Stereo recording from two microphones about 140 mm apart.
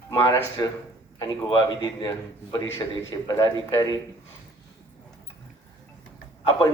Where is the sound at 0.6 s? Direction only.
30° left (ahead or behind).